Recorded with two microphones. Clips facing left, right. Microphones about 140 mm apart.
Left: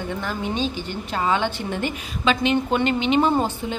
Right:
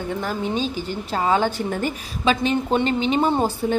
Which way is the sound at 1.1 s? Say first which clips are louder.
Right 2 dB; 40° right (ahead or behind).